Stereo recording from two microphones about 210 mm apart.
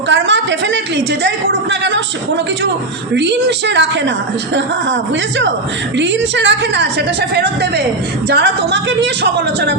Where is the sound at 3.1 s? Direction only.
55° right (ahead or behind).